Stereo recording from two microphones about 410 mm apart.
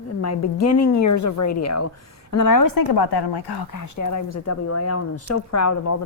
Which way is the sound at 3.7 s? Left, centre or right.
Left.